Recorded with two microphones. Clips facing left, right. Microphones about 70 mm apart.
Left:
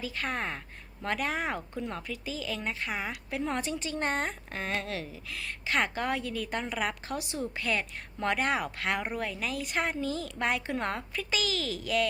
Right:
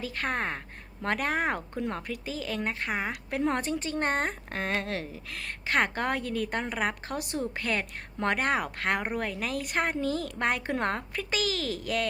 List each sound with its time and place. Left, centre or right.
0.0 s speech: right